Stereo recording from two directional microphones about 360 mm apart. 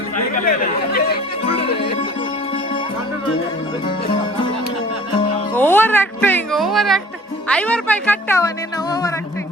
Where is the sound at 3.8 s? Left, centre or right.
Centre.